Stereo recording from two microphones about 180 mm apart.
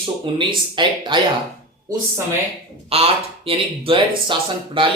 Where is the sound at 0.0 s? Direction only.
25° right (ahead or behind).